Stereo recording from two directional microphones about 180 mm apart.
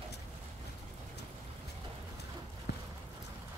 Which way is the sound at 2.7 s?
65° left (ahead or behind).